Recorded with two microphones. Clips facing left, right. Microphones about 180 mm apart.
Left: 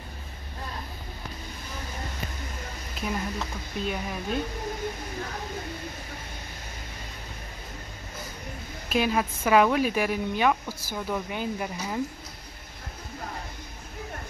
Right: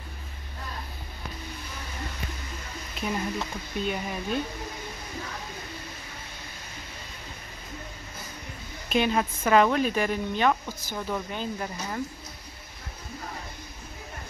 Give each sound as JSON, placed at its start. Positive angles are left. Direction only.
{"t": 3.1, "sound": "speech", "side_deg": 0}
{"t": 8.8, "sound": "speech", "side_deg": 5}